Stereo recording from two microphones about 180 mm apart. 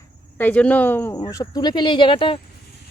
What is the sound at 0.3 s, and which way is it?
Speech, 10° left (ahead or behind).